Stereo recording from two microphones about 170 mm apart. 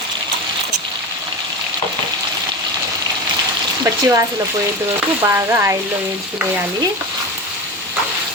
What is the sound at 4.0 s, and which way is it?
Speech, 20° right (ahead or behind).